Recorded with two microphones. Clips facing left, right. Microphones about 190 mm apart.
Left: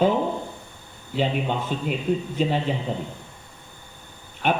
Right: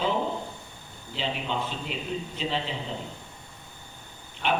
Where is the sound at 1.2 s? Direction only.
50° left (ahead or behind).